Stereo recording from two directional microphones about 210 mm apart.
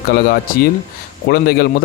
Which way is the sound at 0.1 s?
45° left (ahead or behind).